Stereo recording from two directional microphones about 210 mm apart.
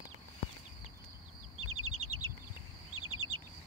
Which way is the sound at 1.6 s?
80° right.